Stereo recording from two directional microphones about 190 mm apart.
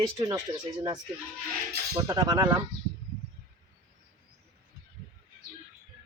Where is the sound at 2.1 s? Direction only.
20° right (ahead or behind).